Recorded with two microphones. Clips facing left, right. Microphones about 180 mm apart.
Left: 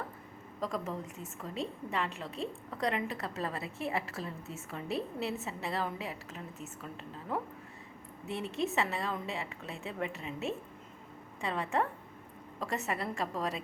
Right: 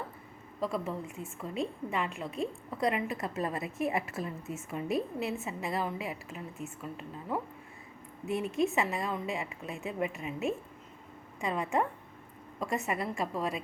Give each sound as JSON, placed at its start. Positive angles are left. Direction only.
{"t": 0.6, "sound": "a woman's voice", "side_deg": -10}
{"t": 8.5, "sound": "a woman's voice", "side_deg": -15}